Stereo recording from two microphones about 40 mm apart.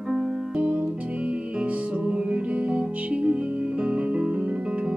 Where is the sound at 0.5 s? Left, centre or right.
Right.